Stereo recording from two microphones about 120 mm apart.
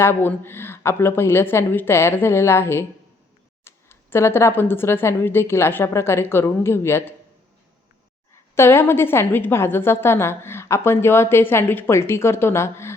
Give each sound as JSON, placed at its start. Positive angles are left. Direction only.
{"t": 0.0, "sound": "a woman's voice", "side_deg": 20}
{"t": 8.5, "sound": "a woman's voice", "side_deg": 20}